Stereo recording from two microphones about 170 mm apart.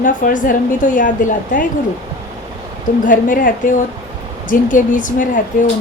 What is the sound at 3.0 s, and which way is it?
A woman's voice, 50° left (ahead or behind).